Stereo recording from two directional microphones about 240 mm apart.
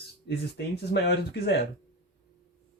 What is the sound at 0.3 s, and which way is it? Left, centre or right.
Speech, left.